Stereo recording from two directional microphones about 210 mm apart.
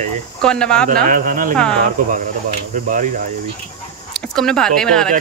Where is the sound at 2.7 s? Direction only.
40° right (ahead or behind).